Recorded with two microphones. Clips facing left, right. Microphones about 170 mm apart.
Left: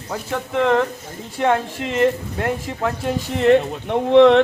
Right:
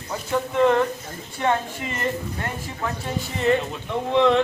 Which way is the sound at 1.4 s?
75° left (ahead or behind).